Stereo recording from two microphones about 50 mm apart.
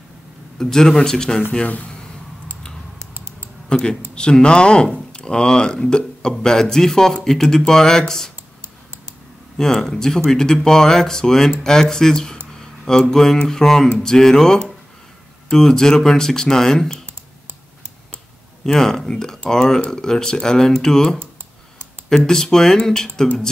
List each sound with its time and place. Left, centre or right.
0.6 s speech: centre
1.6 s speech: left
3.6 s speech: centre
9.6 s speech: centre
18.7 s speech: centre